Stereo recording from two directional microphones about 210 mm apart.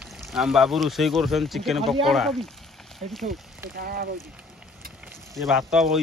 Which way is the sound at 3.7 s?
45° right (ahead or behind).